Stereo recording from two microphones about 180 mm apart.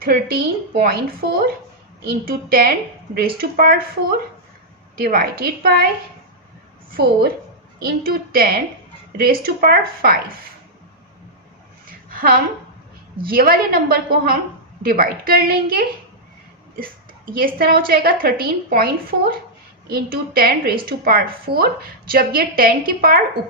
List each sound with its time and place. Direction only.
0.0 s a woman's voice: 55° right (ahead or behind)
4.9 s a woman's voice: 55° right (ahead or behind)
6.9 s a woman's voice: 60° right (ahead or behind)
12.1 s a sound: 55° right (ahead or behind)
13.2 s a woman's voice: 55° right (ahead or behind)
17.3 s a woman's voice: 55° right (ahead or behind)